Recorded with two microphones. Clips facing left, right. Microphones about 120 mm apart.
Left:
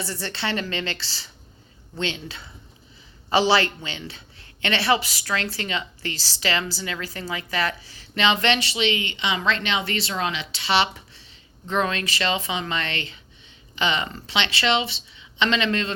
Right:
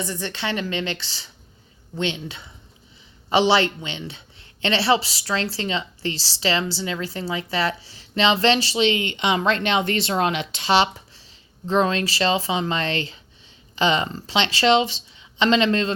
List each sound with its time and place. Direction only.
0.0 s a woman's voice: 15° right (ahead or behind); by 15.9 s 35° right (ahead or behind)